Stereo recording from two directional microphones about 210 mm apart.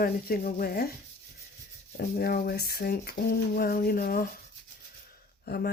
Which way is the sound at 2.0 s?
45° left (ahead or behind).